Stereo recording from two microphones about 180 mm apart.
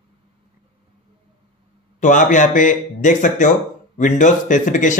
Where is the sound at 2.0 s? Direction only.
45° left (ahead or behind).